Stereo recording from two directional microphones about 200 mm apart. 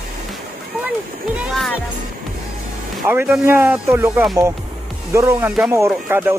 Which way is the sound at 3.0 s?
10° right (ahead or behind).